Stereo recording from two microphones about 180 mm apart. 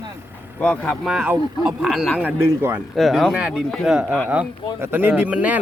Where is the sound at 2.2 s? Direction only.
10° right (ahead or behind).